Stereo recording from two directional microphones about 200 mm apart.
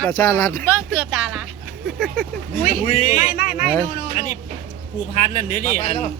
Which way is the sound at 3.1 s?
40° left (ahead or behind).